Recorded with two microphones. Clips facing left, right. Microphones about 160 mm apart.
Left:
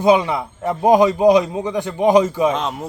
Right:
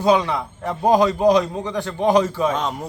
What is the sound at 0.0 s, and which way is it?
A man's voice, 15° left (ahead or behind).